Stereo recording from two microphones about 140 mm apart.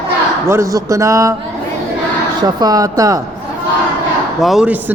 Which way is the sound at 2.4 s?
30° right (ahead or behind).